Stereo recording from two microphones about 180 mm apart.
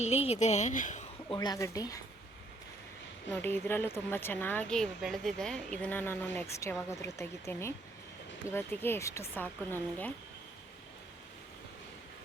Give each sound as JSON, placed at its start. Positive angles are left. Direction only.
{"t": 0.0, "sound": "speech", "side_deg": 35}
{"t": 1.3, "sound": "speech", "side_deg": 20}
{"t": 3.3, "sound": "speech", "side_deg": 10}